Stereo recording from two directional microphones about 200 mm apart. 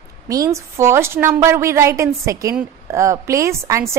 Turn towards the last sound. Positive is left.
turn(degrees=-15)  # may be behind; listen again after turning